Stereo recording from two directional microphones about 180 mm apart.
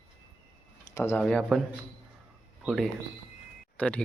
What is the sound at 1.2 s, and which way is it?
Speech, 5° left (ahead or behind).